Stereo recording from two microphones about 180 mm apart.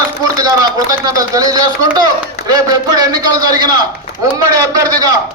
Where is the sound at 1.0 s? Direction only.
20° right (ahead or behind).